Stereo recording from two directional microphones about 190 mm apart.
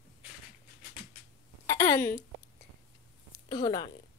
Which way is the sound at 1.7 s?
15° left (ahead or behind).